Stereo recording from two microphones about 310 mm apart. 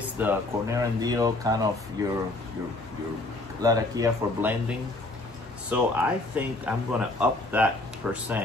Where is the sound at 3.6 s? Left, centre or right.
Centre.